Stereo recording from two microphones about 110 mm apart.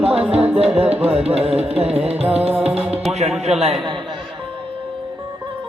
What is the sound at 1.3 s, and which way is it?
Music, 70° right (ahead or behind).